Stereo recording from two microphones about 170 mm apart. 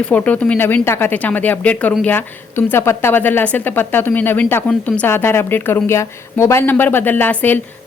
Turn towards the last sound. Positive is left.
turn(degrees=10)  # may be behind; listen again after turning